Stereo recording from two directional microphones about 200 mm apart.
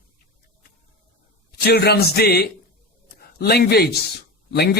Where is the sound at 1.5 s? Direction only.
50° left (ahead or behind).